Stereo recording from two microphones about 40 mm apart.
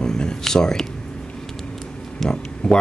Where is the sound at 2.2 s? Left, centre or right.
Left.